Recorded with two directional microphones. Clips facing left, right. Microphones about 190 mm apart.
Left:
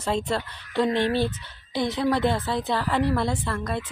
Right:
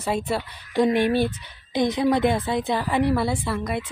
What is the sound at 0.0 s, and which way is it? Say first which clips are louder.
Speech: right 1 dB; 10° right (ahead or behind).